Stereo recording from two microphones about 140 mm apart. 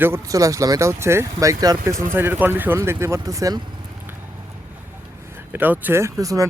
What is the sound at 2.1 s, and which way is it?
Speech, 15° right (ahead or behind).